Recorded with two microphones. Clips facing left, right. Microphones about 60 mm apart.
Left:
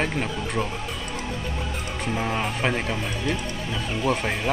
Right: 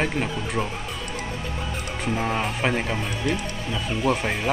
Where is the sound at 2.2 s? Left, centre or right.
Centre.